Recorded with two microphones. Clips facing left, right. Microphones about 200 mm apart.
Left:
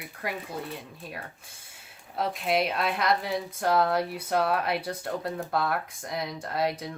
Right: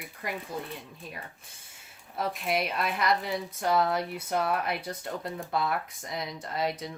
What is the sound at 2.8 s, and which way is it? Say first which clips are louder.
Speech: left 2 dB; 55° left (ahead or behind).